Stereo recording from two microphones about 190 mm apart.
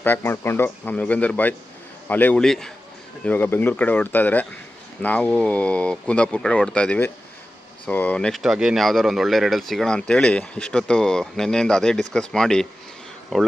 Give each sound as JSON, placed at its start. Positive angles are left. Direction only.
{"t": 0.0, "sound": "speech", "side_deg": 10}